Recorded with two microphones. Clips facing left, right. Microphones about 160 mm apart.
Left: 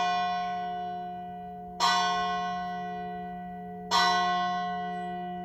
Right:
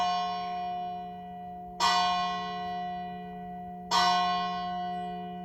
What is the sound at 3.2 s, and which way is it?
Music, 10° right (ahead or behind).